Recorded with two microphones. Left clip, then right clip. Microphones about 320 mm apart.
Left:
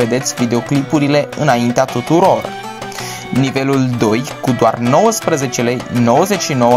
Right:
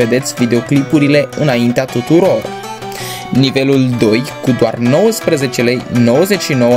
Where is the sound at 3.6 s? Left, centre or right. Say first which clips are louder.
Right 3 dB; centre.